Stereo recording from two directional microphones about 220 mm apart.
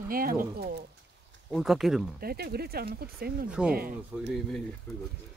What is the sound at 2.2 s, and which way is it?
Speech, 45° right (ahead or behind).